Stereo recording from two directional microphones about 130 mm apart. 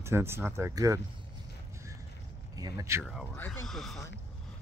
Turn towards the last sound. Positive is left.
turn(degrees=0)  # may be behind; listen again after turning